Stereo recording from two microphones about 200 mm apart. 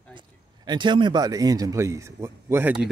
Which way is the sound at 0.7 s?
25° right (ahead or behind).